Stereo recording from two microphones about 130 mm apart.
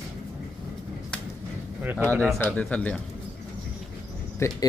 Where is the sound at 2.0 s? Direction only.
10° left (ahead or behind).